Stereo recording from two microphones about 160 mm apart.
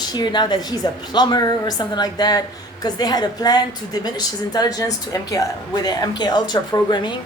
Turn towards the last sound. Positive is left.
turn(degrees=25)  # may be behind; listen again after turning